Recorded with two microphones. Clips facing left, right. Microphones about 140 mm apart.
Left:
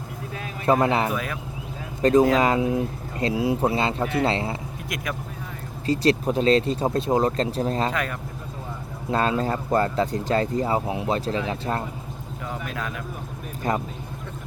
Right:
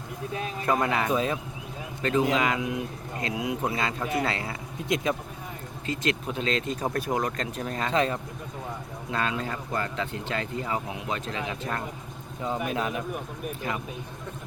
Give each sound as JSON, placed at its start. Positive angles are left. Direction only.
{"t": 0.6, "sound": "a man's voice", "side_deg": 25}
{"t": 1.1, "sound": "speech", "side_deg": -25}
{"t": 2.0, "sound": "speech", "side_deg": 35}
{"t": 4.9, "sound": "speech", "side_deg": -25}
{"t": 5.8, "sound": "speech", "side_deg": 35}
{"t": 7.9, "sound": "speech", "side_deg": -25}
{"t": 9.0, "sound": "speech", "side_deg": 35}
{"t": 12.4, "sound": "speech", "side_deg": -20}
{"t": 13.6, "sound": "speech", "side_deg": 40}